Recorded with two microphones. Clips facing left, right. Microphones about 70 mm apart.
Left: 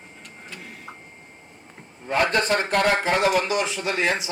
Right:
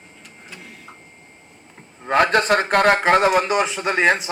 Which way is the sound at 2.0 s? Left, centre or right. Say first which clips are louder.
Right 5 dB; right.